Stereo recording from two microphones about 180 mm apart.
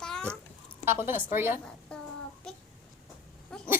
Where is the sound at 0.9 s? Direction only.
15° right (ahead or behind).